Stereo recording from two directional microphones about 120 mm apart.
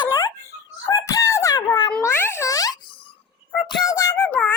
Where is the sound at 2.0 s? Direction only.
20° left (ahead or behind).